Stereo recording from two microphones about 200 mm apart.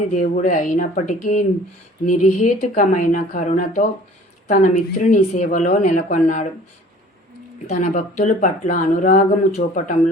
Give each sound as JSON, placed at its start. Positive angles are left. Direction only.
{"t": 0.2, "sound": "speech", "side_deg": 40}
{"t": 7.7, "sound": "speech", "side_deg": 35}